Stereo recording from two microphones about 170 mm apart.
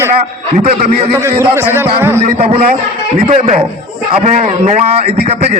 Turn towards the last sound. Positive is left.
turn(degrees=-35)  # may be behind; listen again after turning